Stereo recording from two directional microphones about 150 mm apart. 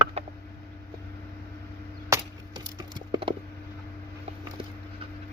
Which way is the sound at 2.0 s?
25° right (ahead or behind).